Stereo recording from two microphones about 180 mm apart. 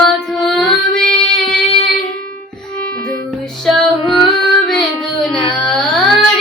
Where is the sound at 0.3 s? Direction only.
Centre (ahead or behind).